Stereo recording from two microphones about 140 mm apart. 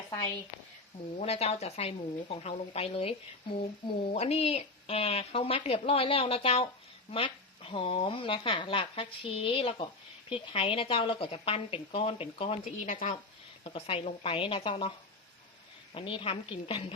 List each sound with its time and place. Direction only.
1.2 s speech: 45° left (ahead or behind)
12.7 s speech: 65° left (ahead or behind)
13.7 s speech: 40° left (ahead or behind)
16.0 s speech: 40° left (ahead or behind)